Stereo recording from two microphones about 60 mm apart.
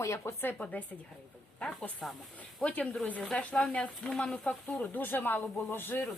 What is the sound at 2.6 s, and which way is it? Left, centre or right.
A woman's voice, left.